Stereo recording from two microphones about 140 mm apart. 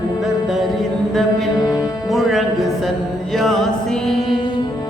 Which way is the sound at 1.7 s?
Centre (ahead or behind).